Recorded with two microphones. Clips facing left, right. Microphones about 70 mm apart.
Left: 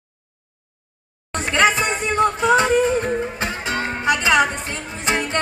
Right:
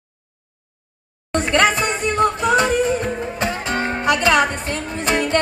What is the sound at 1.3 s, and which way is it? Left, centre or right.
Music, centre.